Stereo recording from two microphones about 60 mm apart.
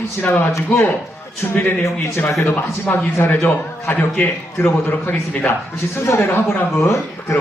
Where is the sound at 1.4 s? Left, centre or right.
Left.